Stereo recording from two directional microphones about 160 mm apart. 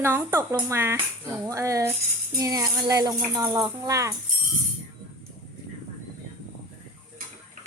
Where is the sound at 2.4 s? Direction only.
20° right (ahead or behind).